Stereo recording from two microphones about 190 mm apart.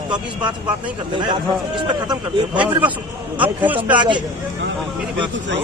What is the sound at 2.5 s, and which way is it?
Speech, 10° right (ahead or behind).